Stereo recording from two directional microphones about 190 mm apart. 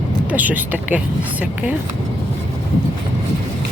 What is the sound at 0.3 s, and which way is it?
Speech, 10° right (ahead or behind).